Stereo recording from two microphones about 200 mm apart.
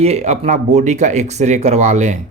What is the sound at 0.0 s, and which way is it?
Speech, 30° right (ahead or behind).